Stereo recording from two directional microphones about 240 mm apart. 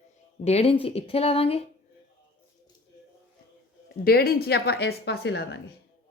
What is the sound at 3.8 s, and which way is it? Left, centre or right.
Speech, left.